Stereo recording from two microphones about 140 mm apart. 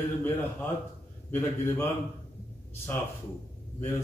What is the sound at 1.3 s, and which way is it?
Speech, 15° left (ahead or behind).